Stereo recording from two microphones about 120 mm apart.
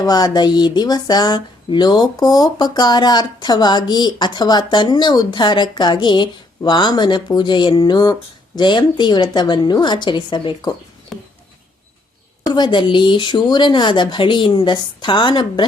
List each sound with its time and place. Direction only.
0.0 s speech: 35° left (ahead or behind)
11.1 s a sound: centre (ahead or behind)
12.5 s speech: 35° left (ahead or behind)